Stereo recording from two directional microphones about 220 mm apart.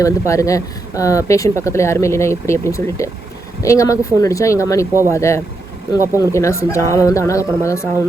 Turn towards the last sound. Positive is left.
turn(degrees=15)  # may be behind; listen again after turning